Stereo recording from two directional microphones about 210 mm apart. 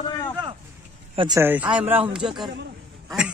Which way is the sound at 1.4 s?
10° right (ahead or behind).